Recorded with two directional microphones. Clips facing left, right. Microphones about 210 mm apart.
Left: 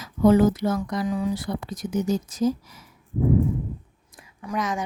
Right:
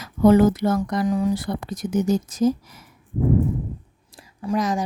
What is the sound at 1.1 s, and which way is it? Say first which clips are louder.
Speech: right 4 dB; 45° right (ahead or behind).